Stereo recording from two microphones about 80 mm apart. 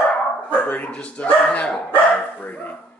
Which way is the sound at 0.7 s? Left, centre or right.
Centre.